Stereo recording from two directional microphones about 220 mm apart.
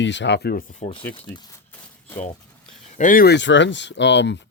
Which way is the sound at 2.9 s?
40° left (ahead or behind).